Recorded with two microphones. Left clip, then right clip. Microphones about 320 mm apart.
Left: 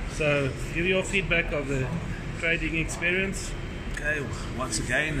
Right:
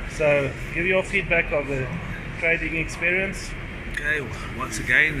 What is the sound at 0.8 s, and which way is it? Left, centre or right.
Speech, centre.